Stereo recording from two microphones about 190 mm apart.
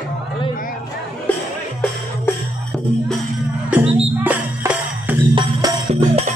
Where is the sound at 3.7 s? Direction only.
5° right (ahead or behind).